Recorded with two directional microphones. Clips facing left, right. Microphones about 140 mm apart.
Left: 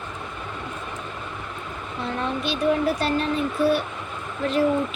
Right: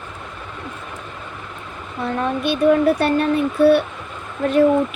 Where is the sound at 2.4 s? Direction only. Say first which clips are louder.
Right 7 dB; 55° right (ahead or behind).